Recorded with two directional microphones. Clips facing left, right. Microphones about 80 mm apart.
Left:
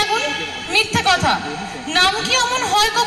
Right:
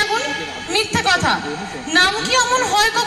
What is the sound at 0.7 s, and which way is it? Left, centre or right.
A woman's voice, right.